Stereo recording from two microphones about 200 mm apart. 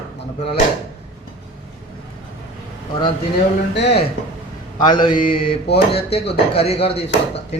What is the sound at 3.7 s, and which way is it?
Speech, 60° left (ahead or behind).